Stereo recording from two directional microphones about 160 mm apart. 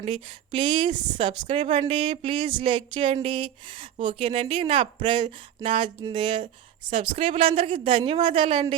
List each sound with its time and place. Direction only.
0.0 s speech: 35° right (ahead or behind)